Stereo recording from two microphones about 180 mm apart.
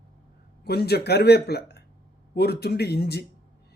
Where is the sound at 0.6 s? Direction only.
60° left (ahead or behind).